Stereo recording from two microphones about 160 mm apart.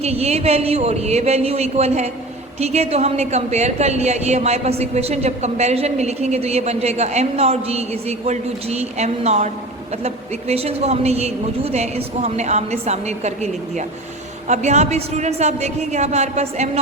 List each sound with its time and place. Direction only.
0.0 s a woman's voice: 40° right (ahead or behind)
10.5 s a woman's voice: 40° right (ahead or behind)